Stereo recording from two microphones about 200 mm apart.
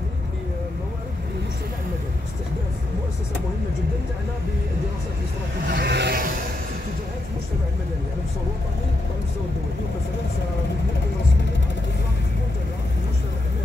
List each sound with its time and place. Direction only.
5.7 s vehicle: 55° right (ahead or behind)